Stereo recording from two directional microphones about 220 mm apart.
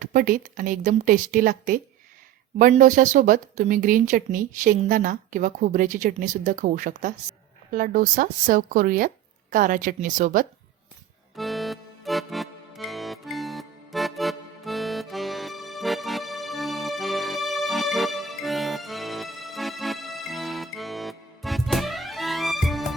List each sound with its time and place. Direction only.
0.0 s speech: 40° right (ahead or behind)
11.3 s music: centre (ahead or behind)